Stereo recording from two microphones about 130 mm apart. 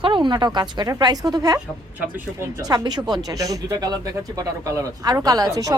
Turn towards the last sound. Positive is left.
turn(degrees=-30)  # may be behind; listen again after turning